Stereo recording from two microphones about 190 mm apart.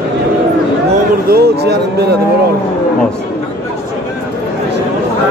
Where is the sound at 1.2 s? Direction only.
55° right (ahead or behind).